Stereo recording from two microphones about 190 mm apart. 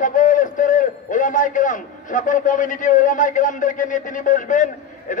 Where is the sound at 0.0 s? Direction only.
45° left (ahead or behind).